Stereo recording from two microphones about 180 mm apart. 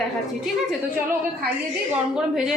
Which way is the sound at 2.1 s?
5° right (ahead or behind).